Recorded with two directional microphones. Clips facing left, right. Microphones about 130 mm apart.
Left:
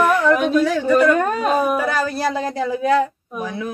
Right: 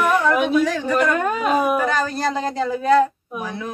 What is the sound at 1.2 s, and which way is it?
Speech, 40° left (ahead or behind).